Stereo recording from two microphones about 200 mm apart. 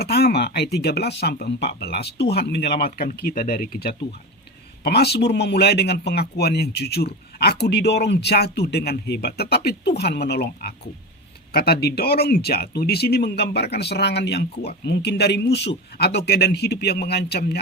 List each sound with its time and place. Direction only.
0.0 s a man's voice: 50° left (ahead or behind)